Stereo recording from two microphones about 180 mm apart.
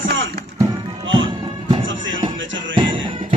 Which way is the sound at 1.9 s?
90° right.